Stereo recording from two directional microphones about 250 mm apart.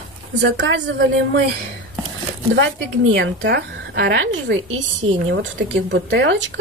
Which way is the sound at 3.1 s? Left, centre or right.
Right.